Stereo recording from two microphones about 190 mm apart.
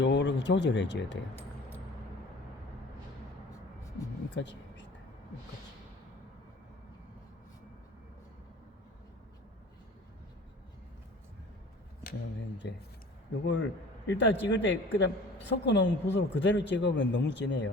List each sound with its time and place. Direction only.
0.0 s a man's voice: 70° left (ahead or behind)
4.4 s a sound: 70° left (ahead or behind)
12.6 s a man's voice: 65° left (ahead or behind)